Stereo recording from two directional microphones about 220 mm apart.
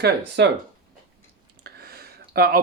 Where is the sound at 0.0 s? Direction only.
50° right (ahead or behind).